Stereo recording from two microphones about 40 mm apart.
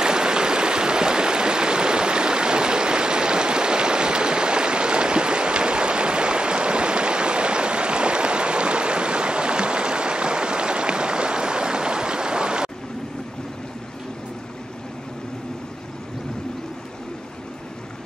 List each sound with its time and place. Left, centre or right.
0.0 s stream: centre